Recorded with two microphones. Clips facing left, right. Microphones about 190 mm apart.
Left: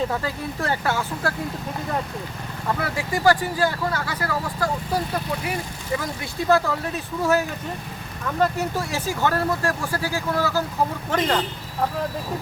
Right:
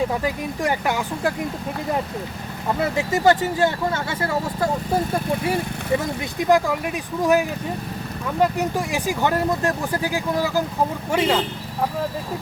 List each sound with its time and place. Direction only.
0.1 s speech: 15° right (ahead or behind)
2.7 s speech: 25° right (ahead or behind)